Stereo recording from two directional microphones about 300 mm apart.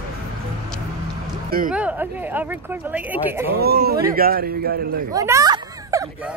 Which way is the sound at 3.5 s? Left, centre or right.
Right.